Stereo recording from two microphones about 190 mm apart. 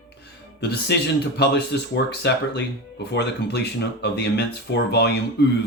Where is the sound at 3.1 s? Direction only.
60° left (ahead or behind).